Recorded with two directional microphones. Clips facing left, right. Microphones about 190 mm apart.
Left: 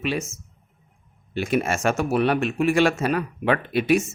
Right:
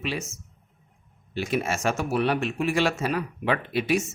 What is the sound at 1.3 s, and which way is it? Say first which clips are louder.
Speech: left 4 dB; 55° left (ahead or behind).